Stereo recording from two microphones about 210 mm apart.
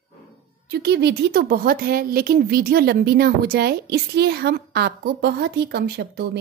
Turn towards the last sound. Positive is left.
turn(degrees=-50)  # may be behind; listen again after turning